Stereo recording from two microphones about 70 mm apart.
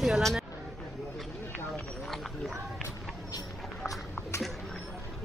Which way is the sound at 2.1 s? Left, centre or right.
Centre.